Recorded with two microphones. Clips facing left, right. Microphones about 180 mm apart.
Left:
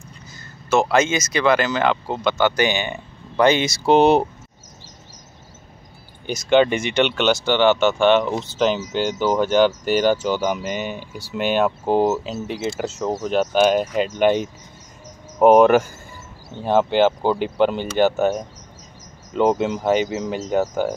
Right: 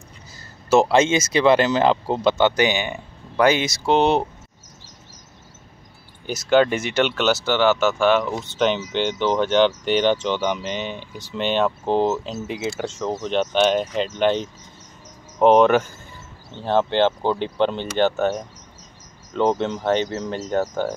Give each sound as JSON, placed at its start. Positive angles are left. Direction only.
{"t": 0.7, "sound": "speech", "side_deg": -30}
{"t": 6.2, "sound": "speech", "side_deg": -5}